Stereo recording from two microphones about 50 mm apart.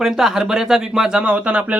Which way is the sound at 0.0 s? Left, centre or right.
Centre.